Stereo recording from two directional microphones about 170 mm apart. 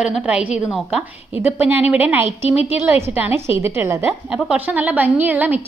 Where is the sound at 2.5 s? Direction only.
35° left (ahead or behind).